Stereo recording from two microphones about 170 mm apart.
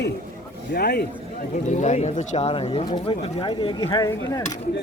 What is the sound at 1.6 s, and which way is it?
Speech, 45° left (ahead or behind).